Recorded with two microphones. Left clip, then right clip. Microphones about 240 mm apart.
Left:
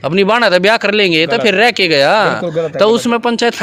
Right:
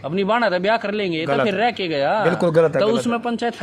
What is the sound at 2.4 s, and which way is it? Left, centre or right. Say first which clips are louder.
Speech: right 1 dB; centre.